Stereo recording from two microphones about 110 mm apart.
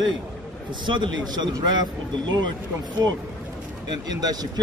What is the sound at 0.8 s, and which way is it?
Speech, 45° right (ahead or behind).